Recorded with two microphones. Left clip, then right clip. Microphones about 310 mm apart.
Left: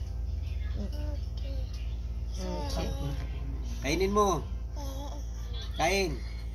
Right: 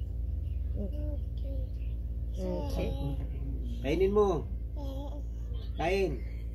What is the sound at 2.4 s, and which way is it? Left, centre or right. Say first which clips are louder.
Speech: right 1 dB; centre.